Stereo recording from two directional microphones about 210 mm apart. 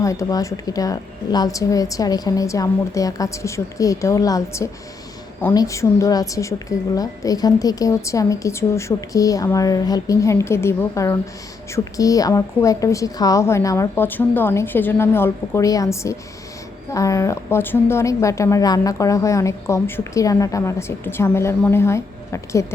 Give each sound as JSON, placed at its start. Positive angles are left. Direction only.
{"t": 0.0, "sound": "a woman's voice", "side_deg": 15}